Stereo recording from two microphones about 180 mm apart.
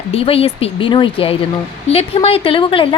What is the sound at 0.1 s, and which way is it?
A woman's voice, 30° left (ahead or behind).